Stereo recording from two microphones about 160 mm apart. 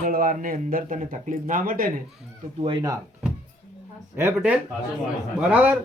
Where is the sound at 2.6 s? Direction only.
30° right (ahead or behind).